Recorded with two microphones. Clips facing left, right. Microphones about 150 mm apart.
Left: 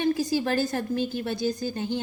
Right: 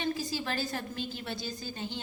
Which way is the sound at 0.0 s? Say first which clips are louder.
Left 9 dB; 50° left (ahead or behind).